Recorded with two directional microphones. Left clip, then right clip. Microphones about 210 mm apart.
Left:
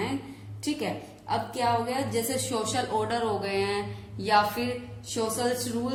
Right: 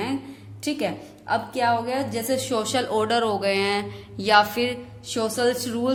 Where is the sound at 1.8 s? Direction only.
50° right (ahead or behind).